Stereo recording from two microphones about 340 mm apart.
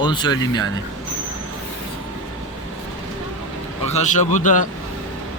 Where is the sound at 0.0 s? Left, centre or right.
Centre.